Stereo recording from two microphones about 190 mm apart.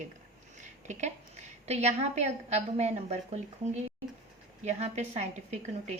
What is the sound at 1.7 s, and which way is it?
A woman's voice, 35° right (ahead or behind).